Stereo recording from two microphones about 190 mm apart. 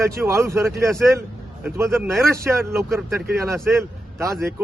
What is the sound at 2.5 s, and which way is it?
Speech, 5° right (ahead or behind).